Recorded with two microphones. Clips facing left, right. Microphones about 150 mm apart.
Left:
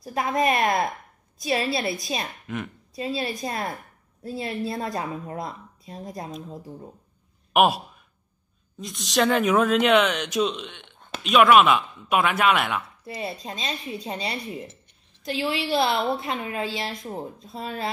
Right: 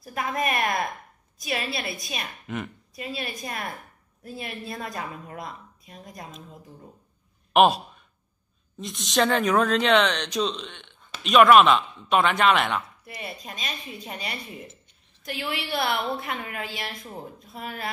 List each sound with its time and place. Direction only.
0.0 s a woman's voice: 25° left (ahead or behind)
2.4 s a woman's voice: centre (ahead or behind)
3.0 s a woman's voice: 25° left (ahead or behind)
7.5 s speech: 5° left (ahead or behind)
13.0 s a woman's voice: 30° left (ahead or behind)